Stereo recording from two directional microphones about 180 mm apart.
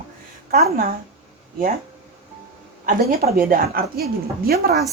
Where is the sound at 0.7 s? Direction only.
55° right (ahead or behind).